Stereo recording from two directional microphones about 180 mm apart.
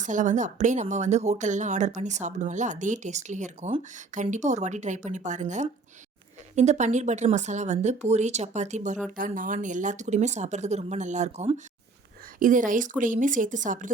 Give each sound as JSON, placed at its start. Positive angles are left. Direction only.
{"t": 0.0, "sound": "speech", "side_deg": -45}